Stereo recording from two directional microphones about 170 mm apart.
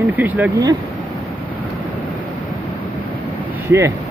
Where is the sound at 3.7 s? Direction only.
15° right (ahead or behind).